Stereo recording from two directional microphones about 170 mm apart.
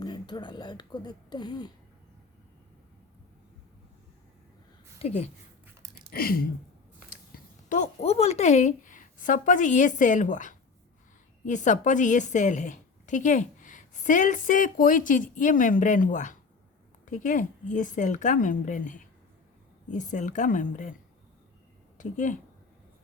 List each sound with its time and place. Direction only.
0.0 s speech: 25° left (ahead or behind)
4.9 s speech: 40° left (ahead or behind)
6.1 s a sound: 60° left (ahead or behind)
8.0 s a woman's voice: 40° left (ahead or behind)
21.9 s speech: 50° left (ahead or behind)